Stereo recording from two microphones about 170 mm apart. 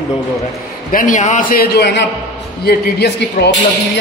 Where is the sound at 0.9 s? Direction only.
50° left (ahead or behind); by 3.5 s 75° left (ahead or behind).